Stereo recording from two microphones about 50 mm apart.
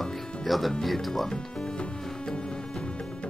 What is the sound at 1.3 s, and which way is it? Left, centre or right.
Music, centre.